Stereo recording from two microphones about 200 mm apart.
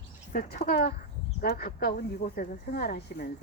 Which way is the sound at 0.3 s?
50° left (ahead or behind).